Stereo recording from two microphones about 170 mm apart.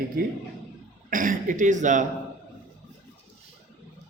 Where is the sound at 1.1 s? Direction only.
50° right (ahead or behind).